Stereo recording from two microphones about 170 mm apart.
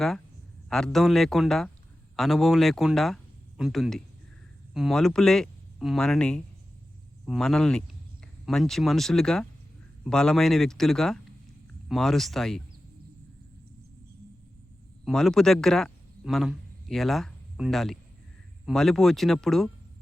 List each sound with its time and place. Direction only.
0.9 s speech: centre (ahead or behind)
15.0 s a man's voice: centre (ahead or behind)